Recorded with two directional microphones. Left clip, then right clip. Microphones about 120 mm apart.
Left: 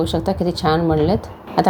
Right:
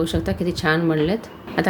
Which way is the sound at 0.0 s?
15° left (ahead or behind).